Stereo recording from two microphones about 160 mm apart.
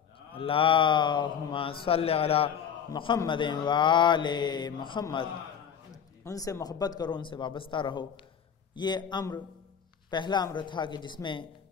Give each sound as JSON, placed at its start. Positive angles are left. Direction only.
{"t": 0.3, "sound": "speech", "side_deg": 35}
{"t": 3.3, "sound": "mantra", "side_deg": 30}
{"t": 6.2, "sound": "mantra", "side_deg": 20}